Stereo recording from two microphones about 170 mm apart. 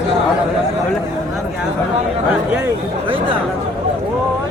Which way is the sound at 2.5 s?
10° right (ahead or behind).